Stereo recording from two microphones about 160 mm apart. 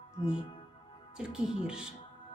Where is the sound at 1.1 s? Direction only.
5° right (ahead or behind).